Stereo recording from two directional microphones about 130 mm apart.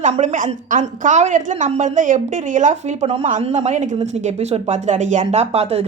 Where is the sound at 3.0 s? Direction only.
50° right (ahead or behind).